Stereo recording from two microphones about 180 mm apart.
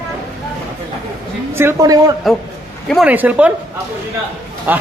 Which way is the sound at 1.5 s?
15° right (ahead or behind).